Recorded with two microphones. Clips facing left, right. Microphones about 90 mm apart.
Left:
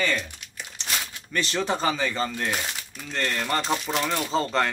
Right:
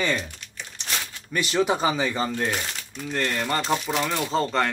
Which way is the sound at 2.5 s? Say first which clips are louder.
Even; centre (ahead or behind).